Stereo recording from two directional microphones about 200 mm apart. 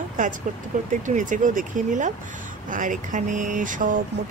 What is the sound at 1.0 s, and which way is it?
Speech, 40° right (ahead or behind).